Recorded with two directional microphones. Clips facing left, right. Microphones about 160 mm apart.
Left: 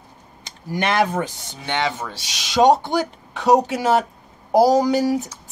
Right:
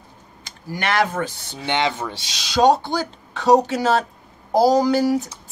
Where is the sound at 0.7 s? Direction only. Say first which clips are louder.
Left 1 dB; 20° left (ahead or behind).